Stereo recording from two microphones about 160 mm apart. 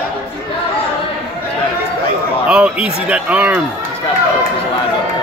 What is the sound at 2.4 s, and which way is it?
Speech, 5° right (ahead or behind).